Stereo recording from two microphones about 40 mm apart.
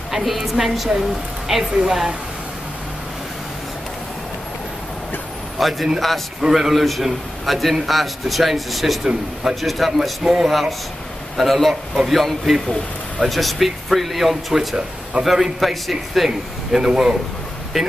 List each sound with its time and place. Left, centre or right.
0.2 s a man's voice: centre
5.6 s a man's voice: centre
6.4 s a man's voice: centre
9.0 s a man's voice: centre
9.6 s a man's voice: centre
11.3 s a man's voice: centre
16.3 s a man's voice: centre
17.8 s a man's voice: centre